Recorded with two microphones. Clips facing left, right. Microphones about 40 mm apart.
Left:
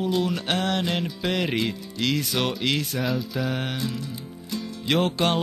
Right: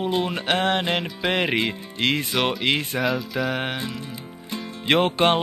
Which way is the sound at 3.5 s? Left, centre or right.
Right.